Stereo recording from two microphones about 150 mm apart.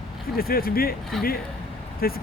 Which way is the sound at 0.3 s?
80° left.